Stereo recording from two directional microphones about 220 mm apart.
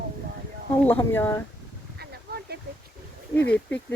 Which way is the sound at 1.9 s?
45° right (ahead or behind).